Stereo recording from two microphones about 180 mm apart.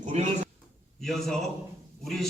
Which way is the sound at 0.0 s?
35° right (ahead or behind).